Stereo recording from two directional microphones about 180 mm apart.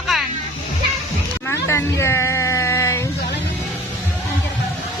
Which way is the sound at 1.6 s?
15° left (ahead or behind).